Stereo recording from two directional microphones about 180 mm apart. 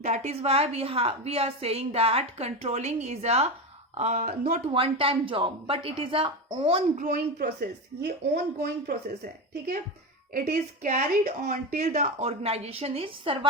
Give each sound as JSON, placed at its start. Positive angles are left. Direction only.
{"t": 0.0, "sound": "a woman's voice", "side_deg": -40}
{"t": 4.6, "sound": "a woman's voice", "side_deg": -30}